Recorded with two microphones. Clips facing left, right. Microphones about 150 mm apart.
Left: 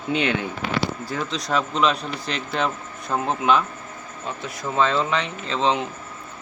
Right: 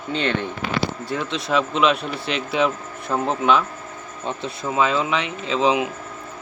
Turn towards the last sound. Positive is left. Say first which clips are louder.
# right 3 dB
turn(degrees=-5)  # may be behind; listen again after turning